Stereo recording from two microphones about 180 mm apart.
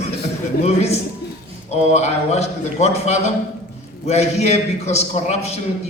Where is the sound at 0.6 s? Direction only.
35° left (ahead or behind).